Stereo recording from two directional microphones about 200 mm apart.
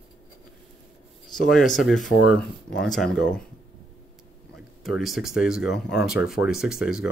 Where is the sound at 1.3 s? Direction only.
Centre (ahead or behind).